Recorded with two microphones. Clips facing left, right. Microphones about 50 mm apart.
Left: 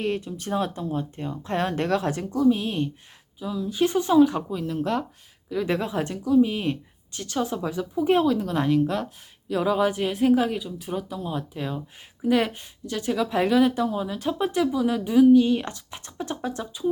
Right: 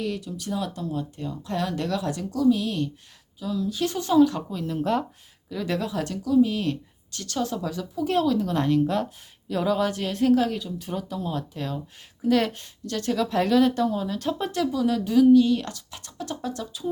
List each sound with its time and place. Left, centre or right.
0.0 s speech: left
2.3 s a woman's voice: left
4.6 s speech: centre
5.5 s a woman's voice: centre